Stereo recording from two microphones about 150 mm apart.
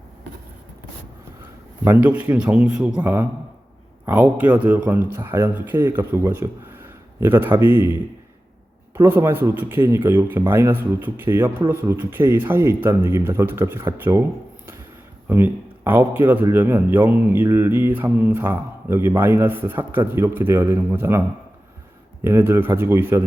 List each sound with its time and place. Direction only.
1.8 s a man's voice: 10° right (ahead or behind)
15.3 s a man's voice: 15° right (ahead or behind)